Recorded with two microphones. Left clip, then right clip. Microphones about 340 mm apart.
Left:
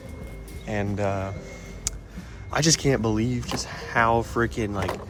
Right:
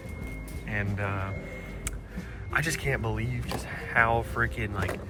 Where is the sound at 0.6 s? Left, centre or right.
Centre.